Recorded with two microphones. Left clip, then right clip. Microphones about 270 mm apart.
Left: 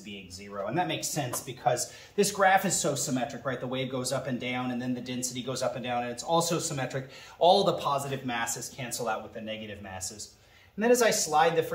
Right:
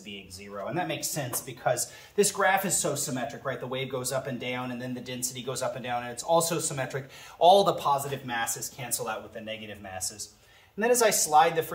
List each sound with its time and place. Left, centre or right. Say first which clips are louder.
0.7 s speech: left 1 dB; centre